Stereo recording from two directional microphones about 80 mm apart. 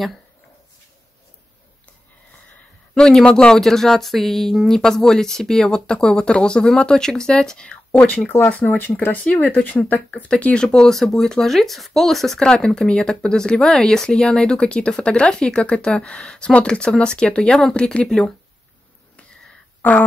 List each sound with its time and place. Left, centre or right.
2.9 s speech: centre